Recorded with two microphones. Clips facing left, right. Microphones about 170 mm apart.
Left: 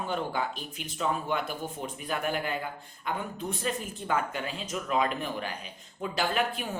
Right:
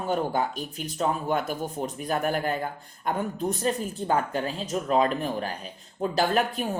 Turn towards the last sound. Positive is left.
turn(degrees=-40)  # may be behind; listen again after turning